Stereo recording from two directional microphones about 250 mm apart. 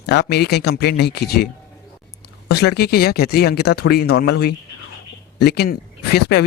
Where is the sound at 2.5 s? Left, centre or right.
Left.